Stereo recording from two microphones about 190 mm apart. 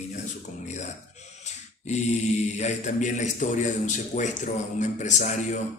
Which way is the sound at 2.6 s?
40° left (ahead or behind).